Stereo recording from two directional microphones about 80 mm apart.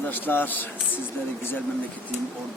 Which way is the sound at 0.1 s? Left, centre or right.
Left.